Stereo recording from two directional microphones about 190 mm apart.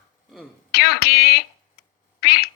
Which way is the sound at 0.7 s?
55° left (ahead or behind).